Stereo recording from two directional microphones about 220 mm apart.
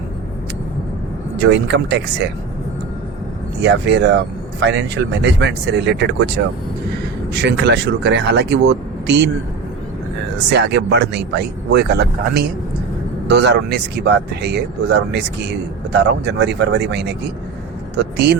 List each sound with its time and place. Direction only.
1.4 s speech: 50° right (ahead or behind)
3.6 s speech: 55° right (ahead or behind)
7.3 s speech: 50° right (ahead or behind)
10.5 s speech: 50° right (ahead or behind)